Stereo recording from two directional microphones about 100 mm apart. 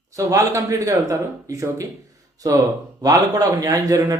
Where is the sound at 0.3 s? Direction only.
35° right (ahead or behind).